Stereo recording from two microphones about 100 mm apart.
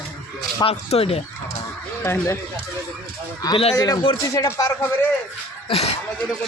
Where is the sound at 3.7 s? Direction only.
35° left (ahead or behind).